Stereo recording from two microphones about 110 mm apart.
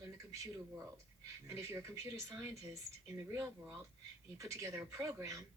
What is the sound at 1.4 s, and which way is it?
Speech, 20° right (ahead or behind).